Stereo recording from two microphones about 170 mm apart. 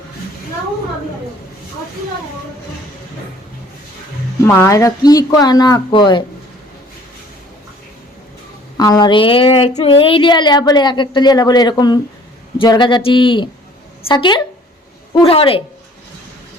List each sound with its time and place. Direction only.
4.4 s child singing: 15° left (ahead or behind)
8.8 s child singing: 25° left (ahead or behind)
15.1 s a woman's voice: 35° left (ahead or behind)